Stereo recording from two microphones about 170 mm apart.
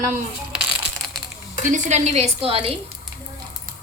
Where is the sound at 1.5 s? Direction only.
45° right (ahead or behind).